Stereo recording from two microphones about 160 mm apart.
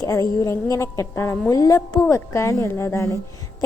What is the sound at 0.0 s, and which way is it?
A woman's voice, 20° left (ahead or behind).